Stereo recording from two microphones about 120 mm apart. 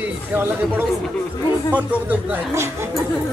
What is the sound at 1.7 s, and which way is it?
Speech, 15° right (ahead or behind).